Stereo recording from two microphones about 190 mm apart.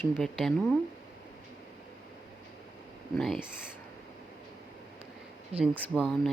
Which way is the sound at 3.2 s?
Centre (ahead or behind).